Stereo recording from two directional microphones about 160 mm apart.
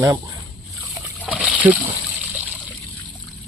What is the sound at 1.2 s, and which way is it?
Splash, 10° right (ahead or behind).